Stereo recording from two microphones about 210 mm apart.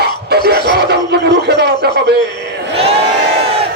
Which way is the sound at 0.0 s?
50° right (ahead or behind).